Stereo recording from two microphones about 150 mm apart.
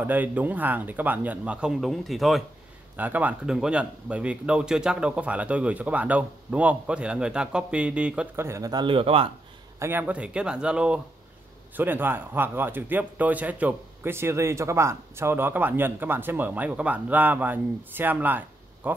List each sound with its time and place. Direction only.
0.0 s a man's voice: 10° right (ahead or behind)
3.0 s a man's voice: 10° right (ahead or behind)
8.5 s a man's voice: 20° right (ahead or behind); by 9.3 s 40° right (ahead or behind)
9.8 s a man's voice: 15° right (ahead or behind)